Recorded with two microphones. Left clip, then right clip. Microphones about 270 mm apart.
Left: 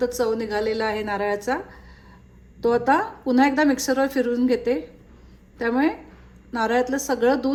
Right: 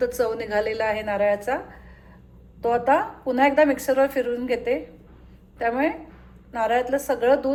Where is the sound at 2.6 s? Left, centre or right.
Centre.